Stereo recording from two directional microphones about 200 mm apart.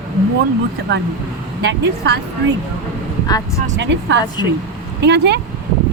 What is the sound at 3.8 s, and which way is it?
Speech, 60° right (ahead or behind).